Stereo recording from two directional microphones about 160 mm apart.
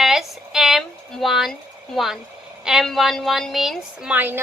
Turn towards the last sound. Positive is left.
turn(degrees=-10)  # may be behind; listen again after turning